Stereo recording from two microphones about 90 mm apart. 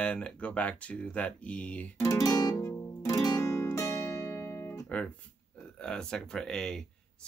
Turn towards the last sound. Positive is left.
turn(degrees=5)  # may be behind; listen again after turning